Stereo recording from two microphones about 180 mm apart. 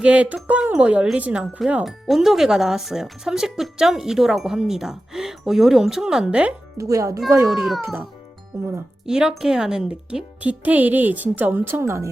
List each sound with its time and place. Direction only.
0.0 s speech: 5° right (ahead or behind)
6.7 s speech: 15° right (ahead or behind)
7.4 s speech: centre (ahead or behind)
8.5 s speech: 15° right (ahead or behind)
9.0 s speech: 5° right (ahead or behind)